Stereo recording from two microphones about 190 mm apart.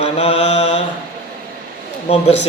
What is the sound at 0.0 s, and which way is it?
Mantra, 30° left (ahead or behind).